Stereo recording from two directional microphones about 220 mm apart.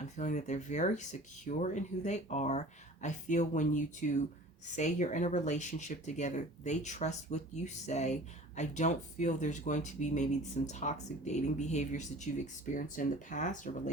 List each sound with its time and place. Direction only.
0.0 s speech: 35° left (ahead or behind)